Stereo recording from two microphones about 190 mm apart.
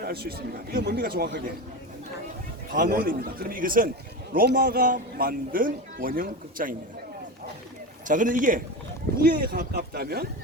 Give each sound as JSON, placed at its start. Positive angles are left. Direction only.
{"t": 0.0, "sound": "a man's voice", "side_deg": -55}
{"t": 2.7, "sound": "speech", "side_deg": -50}
{"t": 8.0, "sound": "a man's voice", "side_deg": -45}